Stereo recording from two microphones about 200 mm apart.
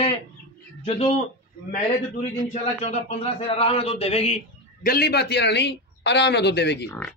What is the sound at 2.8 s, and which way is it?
A man's voice, 30° left (ahead or behind).